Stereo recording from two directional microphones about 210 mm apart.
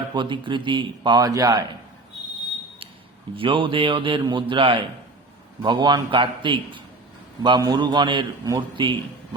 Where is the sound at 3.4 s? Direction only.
25° right (ahead or behind).